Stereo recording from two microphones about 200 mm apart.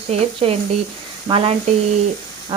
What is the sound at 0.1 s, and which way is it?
Sizzle, 30° right (ahead or behind).